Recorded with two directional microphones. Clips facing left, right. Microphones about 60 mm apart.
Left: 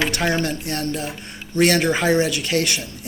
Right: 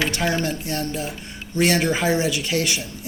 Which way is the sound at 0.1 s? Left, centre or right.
Left.